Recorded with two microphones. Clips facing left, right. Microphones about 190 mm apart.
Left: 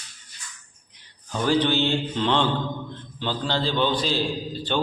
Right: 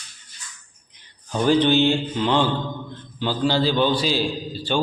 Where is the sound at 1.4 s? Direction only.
20° right (ahead or behind).